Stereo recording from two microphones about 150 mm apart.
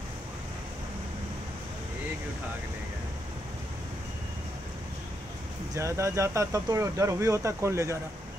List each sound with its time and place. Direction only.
5.8 s speech: 20° right (ahead or behind)